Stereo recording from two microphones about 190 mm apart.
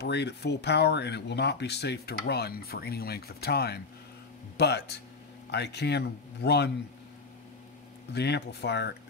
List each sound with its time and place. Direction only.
0.0 s speech: 60° left (ahead or behind)
8.1 s speech: 60° left (ahead or behind)